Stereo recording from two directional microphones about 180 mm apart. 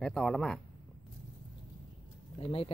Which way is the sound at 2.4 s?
30° left (ahead or behind).